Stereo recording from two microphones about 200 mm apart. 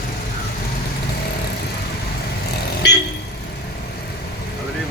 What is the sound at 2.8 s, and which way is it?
Vehicle, 60° left (ahead or behind).